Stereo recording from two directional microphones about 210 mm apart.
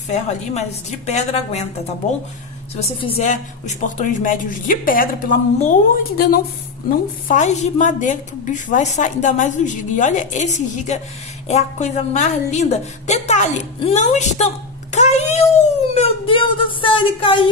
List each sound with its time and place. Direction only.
0.1 s a woman's voice: 35° left (ahead or behind)
2.7 s a woman's voice: 30° left (ahead or behind)
15.9 s a sound: 25° left (ahead or behind)